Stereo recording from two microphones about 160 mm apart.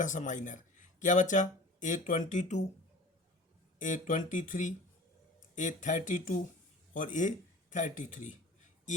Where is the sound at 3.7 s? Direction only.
55° left (ahead or behind).